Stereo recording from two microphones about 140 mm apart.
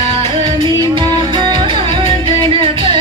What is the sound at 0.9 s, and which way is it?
Music, 35° right (ahead or behind).